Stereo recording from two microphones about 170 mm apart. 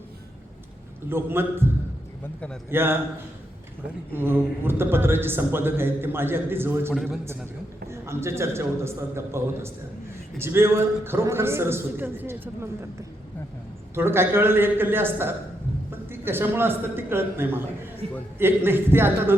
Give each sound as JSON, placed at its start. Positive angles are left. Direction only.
{"t": 1.1, "sound": "a man's voice", "side_deg": -15}
{"t": 4.1, "sound": "a man's voice", "side_deg": -15}
{"t": 6.9, "sound": "a man's voice", "side_deg": 0}
{"t": 7.9, "sound": "a man's voice", "side_deg": -15}
{"t": 13.9, "sound": "a man's voice", "side_deg": -15}